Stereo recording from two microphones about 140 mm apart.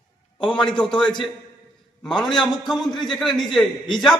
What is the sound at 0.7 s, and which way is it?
A man's voice, 5° left (ahead or behind).